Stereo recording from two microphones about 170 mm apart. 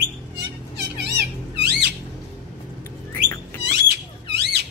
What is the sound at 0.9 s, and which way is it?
Cat, 85° right.